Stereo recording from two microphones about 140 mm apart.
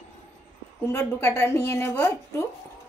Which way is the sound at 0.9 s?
20° left (ahead or behind).